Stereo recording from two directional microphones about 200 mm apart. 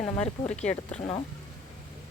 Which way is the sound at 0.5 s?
35° left (ahead or behind).